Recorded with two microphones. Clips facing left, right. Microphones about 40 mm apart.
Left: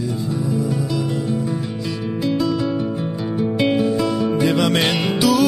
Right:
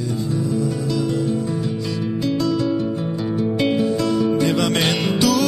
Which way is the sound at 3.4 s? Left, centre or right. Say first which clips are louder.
Left 2 dB; centre.